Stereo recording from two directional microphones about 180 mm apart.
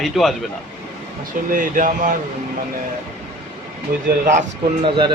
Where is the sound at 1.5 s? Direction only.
50° right (ahead or behind).